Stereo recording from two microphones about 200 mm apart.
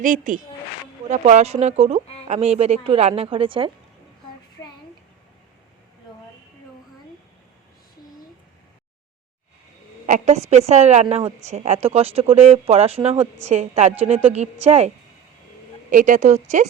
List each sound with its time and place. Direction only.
0.0 s a woman's voice: 40° right (ahead or behind)
10.1 s speech: 35° right (ahead or behind)